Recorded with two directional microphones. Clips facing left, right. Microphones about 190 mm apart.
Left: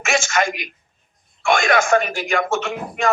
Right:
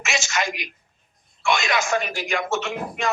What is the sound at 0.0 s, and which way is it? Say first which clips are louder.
Speech: left 6 dB; 50° left (ahead or behind).